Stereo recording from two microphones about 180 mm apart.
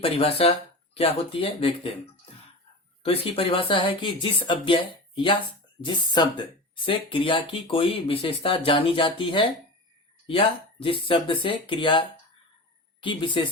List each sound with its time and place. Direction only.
0.0 s speech: 30° left (ahead or behind)
3.0 s speech: 30° left (ahead or behind)